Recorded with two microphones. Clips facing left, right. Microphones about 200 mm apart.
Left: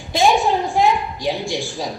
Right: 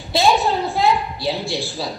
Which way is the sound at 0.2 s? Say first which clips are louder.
Left 1 dB; 15° left (ahead or behind).